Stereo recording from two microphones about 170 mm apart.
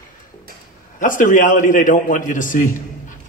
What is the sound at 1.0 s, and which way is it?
A man's voice, 50° left (ahead or behind).